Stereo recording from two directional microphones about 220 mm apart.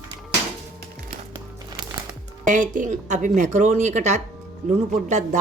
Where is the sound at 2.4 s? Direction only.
35° right (ahead or behind).